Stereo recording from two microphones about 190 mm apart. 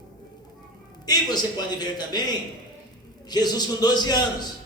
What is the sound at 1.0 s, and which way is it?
A man's voice, 20° left (ahead or behind).